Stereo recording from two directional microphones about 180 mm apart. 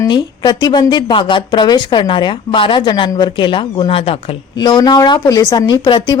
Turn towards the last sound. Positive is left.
turn(degrees=25)  # may be behind; listen again after turning